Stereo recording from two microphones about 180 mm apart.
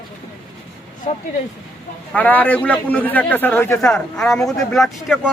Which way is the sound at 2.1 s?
10° left (ahead or behind).